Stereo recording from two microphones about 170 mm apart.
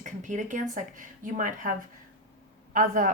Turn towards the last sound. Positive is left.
turn(degrees=-55)  # may be behind; listen again after turning